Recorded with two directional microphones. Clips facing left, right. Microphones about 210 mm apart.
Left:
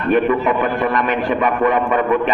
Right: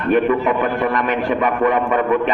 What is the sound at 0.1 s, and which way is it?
A man's voice, 45° right (ahead or behind).